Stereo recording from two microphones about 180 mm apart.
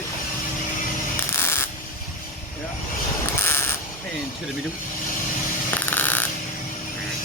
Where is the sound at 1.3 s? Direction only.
15° left (ahead or behind).